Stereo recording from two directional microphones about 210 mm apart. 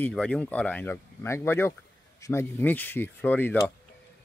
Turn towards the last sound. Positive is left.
turn(degrees=10)  # may be behind; listen again after turning